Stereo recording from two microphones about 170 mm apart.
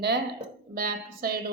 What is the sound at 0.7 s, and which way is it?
Speech, 60° right (ahead or behind).